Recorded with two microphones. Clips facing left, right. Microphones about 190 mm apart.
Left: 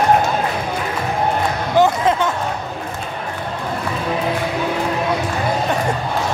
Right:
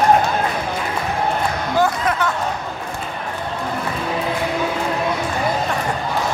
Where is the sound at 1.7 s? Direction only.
20° left (ahead or behind).